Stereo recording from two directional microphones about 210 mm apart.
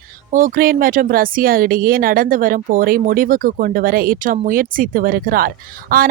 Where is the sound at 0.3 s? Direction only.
40° right (ahead or behind).